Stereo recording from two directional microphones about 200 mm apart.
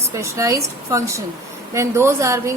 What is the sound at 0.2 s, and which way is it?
A woman's voice, 15° right (ahead or behind).